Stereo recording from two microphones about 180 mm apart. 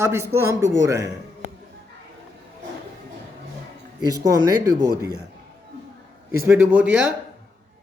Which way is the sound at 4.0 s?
20° right (ahead or behind).